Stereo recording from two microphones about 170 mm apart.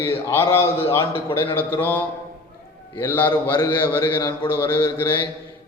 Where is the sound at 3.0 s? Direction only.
10° left (ahead or behind).